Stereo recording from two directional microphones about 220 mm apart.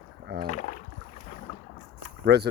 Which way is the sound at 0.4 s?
35° left (ahead or behind).